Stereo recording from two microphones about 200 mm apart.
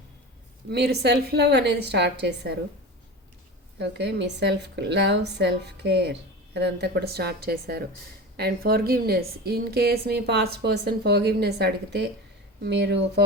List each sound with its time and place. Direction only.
0.7 s a woman's voice: 55° right (ahead or behind)
3.8 s a woman's voice: 60° right (ahead or behind)